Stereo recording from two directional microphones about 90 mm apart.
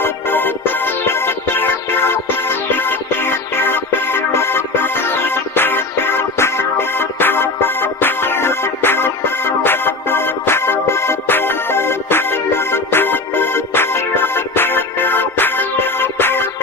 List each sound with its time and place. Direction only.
0.0 s music: 20° left (ahead or behind)